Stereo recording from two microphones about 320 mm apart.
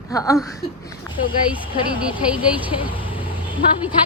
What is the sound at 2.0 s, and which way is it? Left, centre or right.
Speech, centre.